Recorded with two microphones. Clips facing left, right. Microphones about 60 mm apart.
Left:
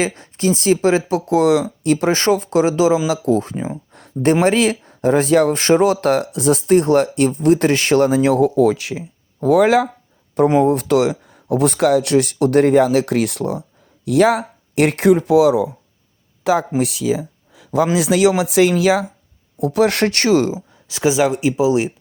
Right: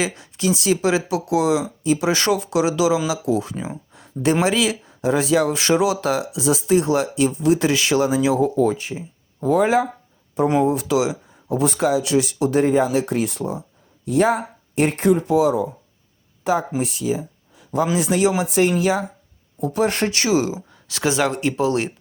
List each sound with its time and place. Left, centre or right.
0.0 s speech: left
1.8 s speech: left
2.0 s speech: left
3.9 s a sound: left
4.4 s speech: left
10.6 s speech: left
14.0 s speech: left
20.5 s speech: centre